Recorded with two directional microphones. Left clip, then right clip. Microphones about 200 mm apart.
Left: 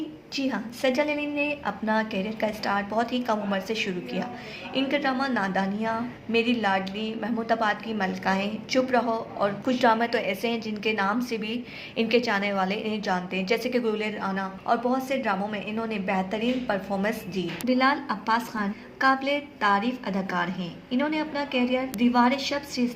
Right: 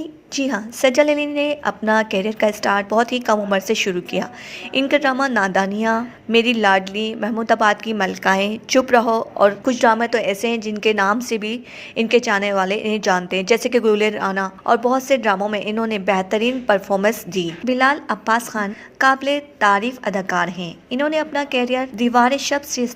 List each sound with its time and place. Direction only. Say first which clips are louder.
0.3 s a woman's voice: right 8 dB; 40° right (ahead or behind)